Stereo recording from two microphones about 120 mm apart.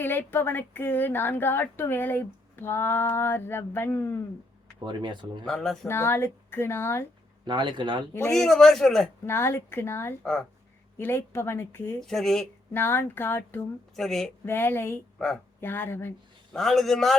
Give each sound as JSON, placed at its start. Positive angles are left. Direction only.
{"t": 0.0, "sound": "speech", "side_deg": 15}
{"t": 4.9, "sound": "speech", "side_deg": -40}
{"t": 5.5, "sound": "a man's voice", "side_deg": 5}
{"t": 5.9, "sound": "a woman's voice", "side_deg": 20}
{"t": 7.4, "sound": "speech", "side_deg": -40}
{"t": 8.3, "sound": "a man's voice", "side_deg": 5}
{"t": 9.2, "sound": "a woman's voice", "side_deg": 20}
{"t": 11.9, "sound": "a man's voice", "side_deg": 5}
{"t": 12.7, "sound": "a woman's voice", "side_deg": 20}
{"t": 13.9, "sound": "a man's voice", "side_deg": 5}
{"t": 14.4, "sound": "a woman's voice", "side_deg": 20}
{"t": 16.5, "sound": "a man's voice", "side_deg": 5}